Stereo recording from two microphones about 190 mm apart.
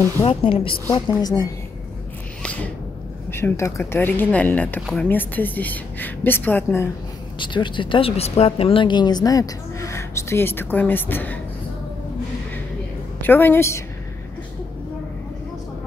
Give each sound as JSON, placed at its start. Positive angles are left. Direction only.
{"t": 0.2, "sound": "speech", "side_deg": 30}
{"t": 2.4, "sound": "a sound", "side_deg": 5}
{"t": 3.3, "sound": "a woman's voice", "side_deg": 10}
{"t": 7.3, "sound": "speech", "side_deg": 25}
{"t": 13.2, "sound": "a woman's voice", "side_deg": 10}